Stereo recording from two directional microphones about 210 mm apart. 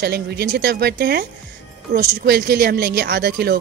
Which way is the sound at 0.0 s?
50° right (ahead or behind).